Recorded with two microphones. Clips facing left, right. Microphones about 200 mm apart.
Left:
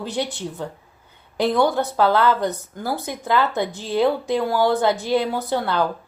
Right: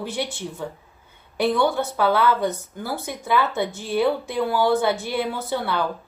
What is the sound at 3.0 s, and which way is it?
A woman's voice, 15° left (ahead or behind).